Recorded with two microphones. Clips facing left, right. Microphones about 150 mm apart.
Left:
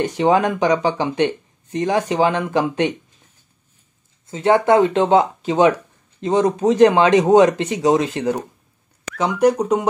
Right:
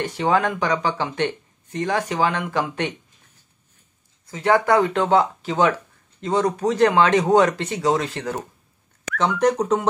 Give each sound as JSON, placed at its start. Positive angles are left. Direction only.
{"t": 0.0, "sound": "speech", "side_deg": 20}
{"t": 4.3, "sound": "speech", "side_deg": 25}
{"t": 9.2, "sound": "speech", "side_deg": 10}